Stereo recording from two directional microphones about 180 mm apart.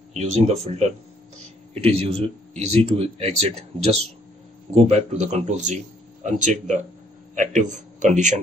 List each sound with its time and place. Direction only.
0.1 s speech: 40° right (ahead or behind)